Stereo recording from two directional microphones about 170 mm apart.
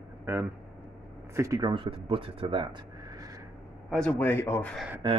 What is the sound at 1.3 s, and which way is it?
Speech, 20° right (ahead or behind).